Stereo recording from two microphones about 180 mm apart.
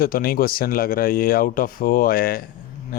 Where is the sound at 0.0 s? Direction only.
55° left (ahead or behind).